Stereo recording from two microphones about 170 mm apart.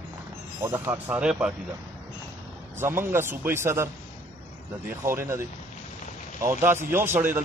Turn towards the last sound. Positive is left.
turn(degrees=-15)  # may be behind; listen again after turning